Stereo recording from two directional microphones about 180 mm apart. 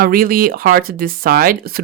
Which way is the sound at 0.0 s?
55° right (ahead or behind).